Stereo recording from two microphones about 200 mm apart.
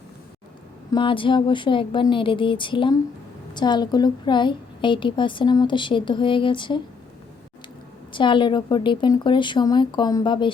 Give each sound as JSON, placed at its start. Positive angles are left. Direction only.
{"t": 0.9, "sound": "a woman's voice", "side_deg": 25}
{"t": 8.1, "sound": "a woman's voice", "side_deg": 25}